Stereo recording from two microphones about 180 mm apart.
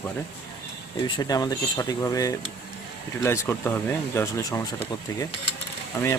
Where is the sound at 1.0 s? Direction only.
25° left (ahead or behind).